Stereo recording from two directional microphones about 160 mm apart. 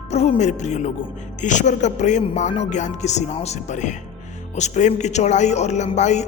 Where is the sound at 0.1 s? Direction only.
45° left (ahead or behind).